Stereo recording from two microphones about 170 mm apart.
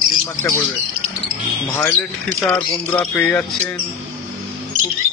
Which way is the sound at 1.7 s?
15° left (ahead or behind).